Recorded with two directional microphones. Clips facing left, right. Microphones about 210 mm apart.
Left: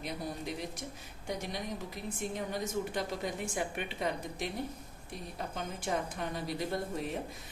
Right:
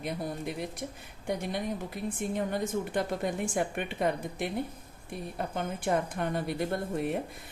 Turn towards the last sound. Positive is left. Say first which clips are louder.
# right 4 dB
turn(degrees=-55)  # may be behind; listen again after turning